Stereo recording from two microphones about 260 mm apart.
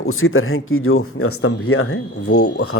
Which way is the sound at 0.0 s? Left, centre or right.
Left.